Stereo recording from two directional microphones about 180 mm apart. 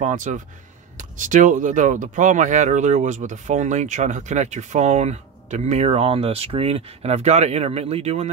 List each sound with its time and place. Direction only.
0.0 s speech: 45° right (ahead or behind)